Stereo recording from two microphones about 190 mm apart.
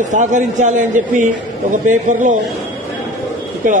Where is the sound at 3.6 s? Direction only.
45° right (ahead or behind).